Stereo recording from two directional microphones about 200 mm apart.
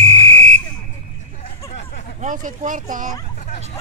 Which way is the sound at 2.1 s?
40° right (ahead or behind).